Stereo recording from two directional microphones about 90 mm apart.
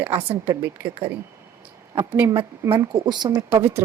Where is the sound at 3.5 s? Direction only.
35° right (ahead or behind).